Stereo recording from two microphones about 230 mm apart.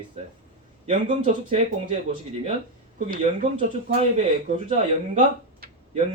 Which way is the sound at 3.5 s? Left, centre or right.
Right.